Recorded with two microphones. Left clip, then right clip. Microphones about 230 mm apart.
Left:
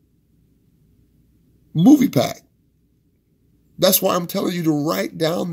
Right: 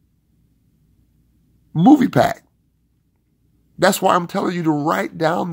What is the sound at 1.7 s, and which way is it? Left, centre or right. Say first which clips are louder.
Speech: right 2 dB; centre.